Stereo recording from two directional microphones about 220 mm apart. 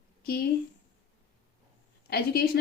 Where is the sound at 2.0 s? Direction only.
45° left (ahead or behind).